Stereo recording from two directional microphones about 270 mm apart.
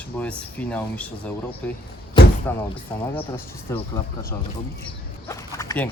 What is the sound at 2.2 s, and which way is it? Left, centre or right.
Slam, centre.